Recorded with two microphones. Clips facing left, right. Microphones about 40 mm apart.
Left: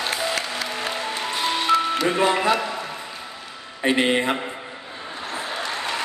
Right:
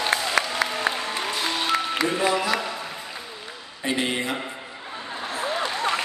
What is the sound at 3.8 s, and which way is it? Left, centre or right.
Speech, left.